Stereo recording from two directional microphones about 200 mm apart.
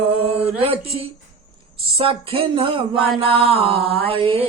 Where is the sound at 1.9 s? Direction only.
30° right (ahead or behind).